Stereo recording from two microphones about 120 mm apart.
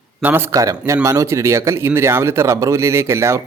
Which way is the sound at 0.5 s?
25° right (ahead or behind).